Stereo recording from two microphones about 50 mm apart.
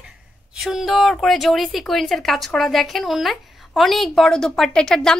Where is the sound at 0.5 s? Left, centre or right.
Centre.